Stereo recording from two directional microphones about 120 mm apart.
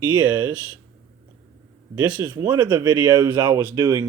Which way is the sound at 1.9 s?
20° right (ahead or behind).